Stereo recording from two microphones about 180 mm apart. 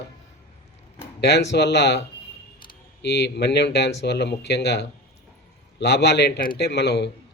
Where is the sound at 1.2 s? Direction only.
70° left (ahead or behind).